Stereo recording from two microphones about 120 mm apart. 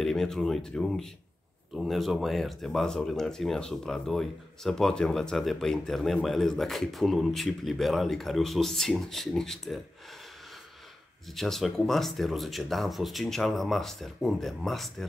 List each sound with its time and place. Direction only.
0.0 s speech: 5° left (ahead or behind)
11.3 s speech: centre (ahead or behind)